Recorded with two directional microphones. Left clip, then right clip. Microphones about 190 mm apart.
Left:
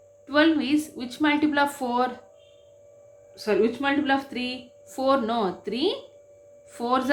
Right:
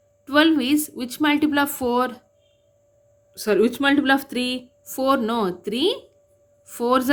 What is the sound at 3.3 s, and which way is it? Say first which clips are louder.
A woman's voice: right 3 dB; 55° right (ahead or behind).